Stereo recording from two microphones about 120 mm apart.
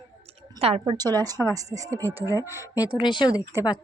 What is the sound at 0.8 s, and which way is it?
A woman's voice, 35° right (ahead or behind).